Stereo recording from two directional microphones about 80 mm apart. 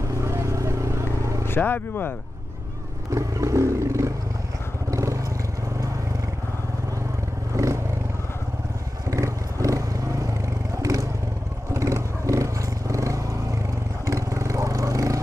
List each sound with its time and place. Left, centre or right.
0.2 s vehicle: right
1.5 s speech: left
3.1 s roaring cats: right
4.9 s vehicle: right
7.5 s vehicle: right
9.1 s vehicle: right